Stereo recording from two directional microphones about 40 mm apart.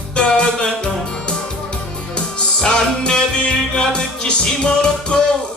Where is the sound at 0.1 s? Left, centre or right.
Left.